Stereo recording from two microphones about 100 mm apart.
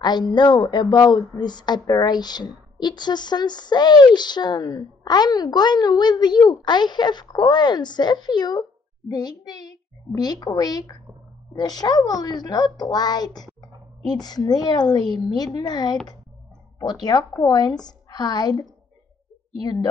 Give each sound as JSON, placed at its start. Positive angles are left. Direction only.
{"t": 0.0, "sound": "a child's voice", "side_deg": 45}